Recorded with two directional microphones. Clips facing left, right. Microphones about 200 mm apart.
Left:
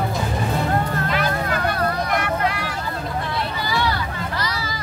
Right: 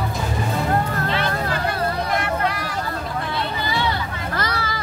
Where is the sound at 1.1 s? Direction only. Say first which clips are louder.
Left 1 dB; 30° right (ahead or behind).